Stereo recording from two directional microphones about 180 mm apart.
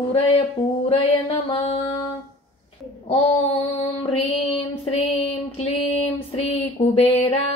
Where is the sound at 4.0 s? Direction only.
30° left (ahead or behind).